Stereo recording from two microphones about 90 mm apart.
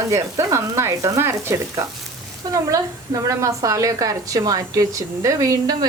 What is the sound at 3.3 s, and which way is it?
Speech, 35° right (ahead or behind).